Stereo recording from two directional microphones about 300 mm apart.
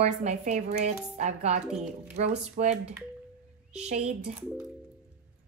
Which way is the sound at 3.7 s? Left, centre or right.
Right.